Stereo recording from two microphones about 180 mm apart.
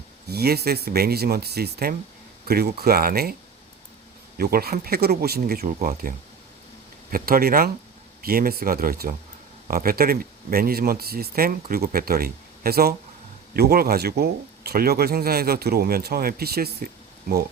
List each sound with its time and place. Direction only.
0.3 s speech: 60° right (ahead or behind)
4.4 s speech: 55° right (ahead or behind)